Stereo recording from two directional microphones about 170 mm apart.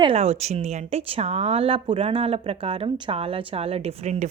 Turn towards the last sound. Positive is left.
turn(degrees=-40)  # may be behind; listen again after turning